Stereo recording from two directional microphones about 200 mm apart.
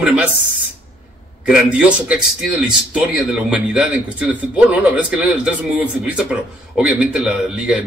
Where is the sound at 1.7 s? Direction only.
5° right (ahead or behind).